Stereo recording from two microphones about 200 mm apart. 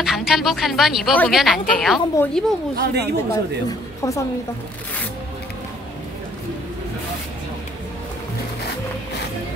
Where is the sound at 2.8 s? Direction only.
55° right (ahead or behind).